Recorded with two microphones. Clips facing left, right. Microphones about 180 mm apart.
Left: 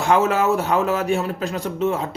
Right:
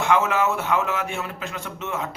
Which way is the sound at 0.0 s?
35° left (ahead or behind).